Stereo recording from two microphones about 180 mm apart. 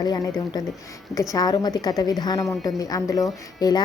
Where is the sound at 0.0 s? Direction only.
20° left (ahead or behind).